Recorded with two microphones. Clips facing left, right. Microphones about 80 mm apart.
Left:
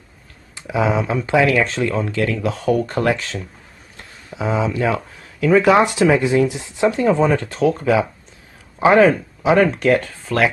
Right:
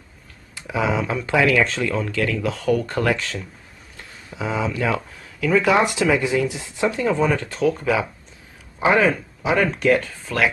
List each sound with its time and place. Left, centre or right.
0.6 s speech: left
4.4 s speech: left
7.0 s speech: left